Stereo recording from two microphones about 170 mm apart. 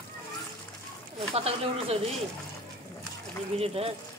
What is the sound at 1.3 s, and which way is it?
Speech, 35° right (ahead or behind).